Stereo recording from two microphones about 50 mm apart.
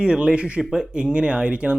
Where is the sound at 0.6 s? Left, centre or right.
Centre.